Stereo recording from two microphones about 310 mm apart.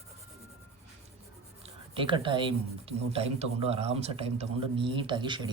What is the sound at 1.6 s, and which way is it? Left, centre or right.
Speech, centre.